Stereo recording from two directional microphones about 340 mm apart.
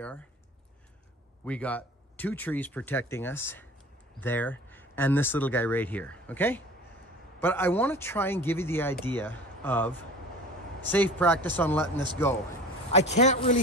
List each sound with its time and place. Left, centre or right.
1.4 s speech: centre
13.2 s speech: left